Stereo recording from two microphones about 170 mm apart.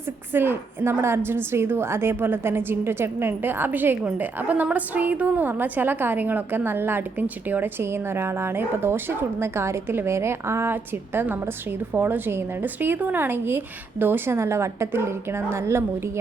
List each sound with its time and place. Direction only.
0.3 s a woman's voice: 10° right (ahead or behind)